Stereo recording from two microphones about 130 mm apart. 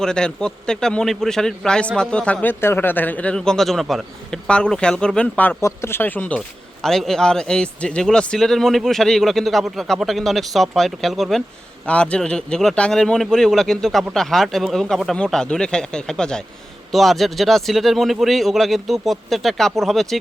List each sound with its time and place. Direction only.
0.0 s a man's voice: 5° left (ahead or behind)